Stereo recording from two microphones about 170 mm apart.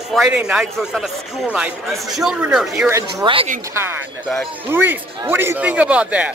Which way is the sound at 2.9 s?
20° right (ahead or behind).